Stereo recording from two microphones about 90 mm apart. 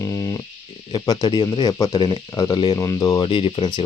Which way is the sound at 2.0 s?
45° left (ahead or behind).